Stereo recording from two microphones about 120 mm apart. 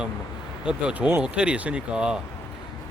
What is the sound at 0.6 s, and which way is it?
Speech, 10° right (ahead or behind).